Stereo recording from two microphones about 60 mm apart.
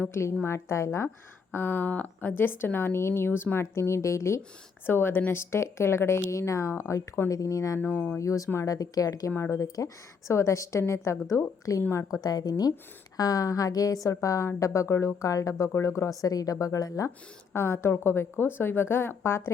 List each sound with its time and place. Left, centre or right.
0.1 s a woman's voice: left
1.5 s a woman's voice: left
4.9 s a woman's voice: left
7.3 s a woman's voice: left
7.8 s a woman's voice: left
8.2 s a woman's voice: left
8.6 s speech: left
9.4 s a woman's voice: left
12.2 s a woman's voice: left
15.7 s a woman's voice: left
17.5 s a woman's voice: left